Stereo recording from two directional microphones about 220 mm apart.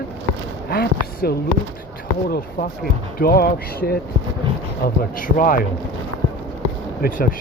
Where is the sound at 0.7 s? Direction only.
45° left (ahead or behind).